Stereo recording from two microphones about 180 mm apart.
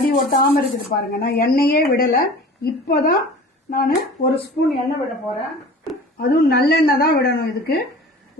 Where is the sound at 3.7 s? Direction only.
60° left (ahead or behind).